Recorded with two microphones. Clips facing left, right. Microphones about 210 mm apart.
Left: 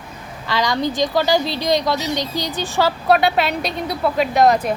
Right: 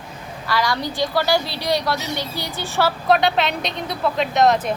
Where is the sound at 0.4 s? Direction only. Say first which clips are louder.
Left 3 dB; 20° left (ahead or behind).